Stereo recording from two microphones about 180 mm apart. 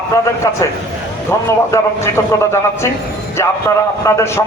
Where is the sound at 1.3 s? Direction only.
15° left (ahead or behind).